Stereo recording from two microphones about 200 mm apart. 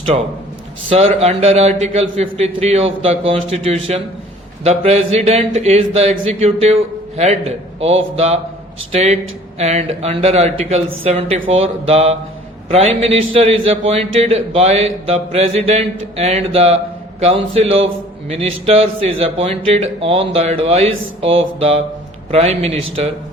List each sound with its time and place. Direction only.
0.9 s a man's voice: 30° right (ahead or behind)